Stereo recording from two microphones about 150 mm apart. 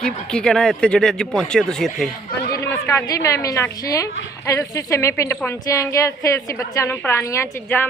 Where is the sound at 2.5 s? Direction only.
20° left (ahead or behind).